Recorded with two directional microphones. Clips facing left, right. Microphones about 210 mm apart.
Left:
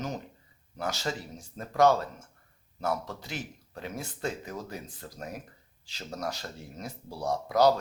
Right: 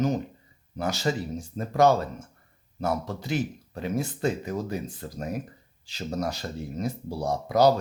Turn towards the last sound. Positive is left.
turn(degrees=-20)  # may be behind; listen again after turning